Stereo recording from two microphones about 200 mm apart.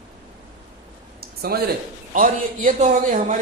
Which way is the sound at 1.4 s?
50° right (ahead or behind).